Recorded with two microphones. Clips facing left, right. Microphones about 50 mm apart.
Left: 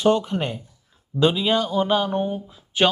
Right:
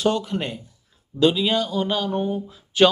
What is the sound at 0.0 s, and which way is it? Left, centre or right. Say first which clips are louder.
Speech: left 3 dB; left.